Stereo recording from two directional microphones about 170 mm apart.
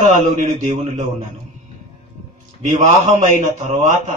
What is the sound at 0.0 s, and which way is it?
A man's voice, 50° right (ahead or behind).